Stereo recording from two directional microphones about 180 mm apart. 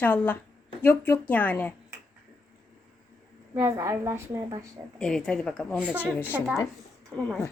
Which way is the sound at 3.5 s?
15° right (ahead or behind).